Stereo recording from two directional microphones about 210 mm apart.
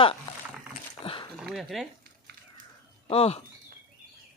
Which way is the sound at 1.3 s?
Centre (ahead or behind).